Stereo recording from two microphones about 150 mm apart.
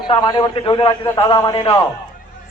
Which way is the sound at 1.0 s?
15° left (ahead or behind).